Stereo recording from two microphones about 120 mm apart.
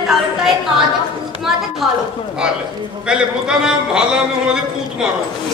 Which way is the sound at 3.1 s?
5° right (ahead or behind).